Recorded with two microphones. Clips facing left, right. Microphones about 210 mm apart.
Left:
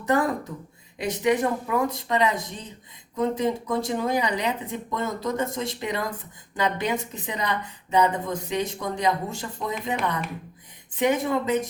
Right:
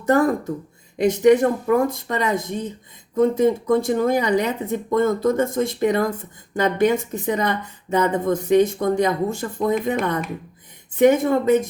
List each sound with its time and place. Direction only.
0.0 s a woman's voice: 45° right (ahead or behind)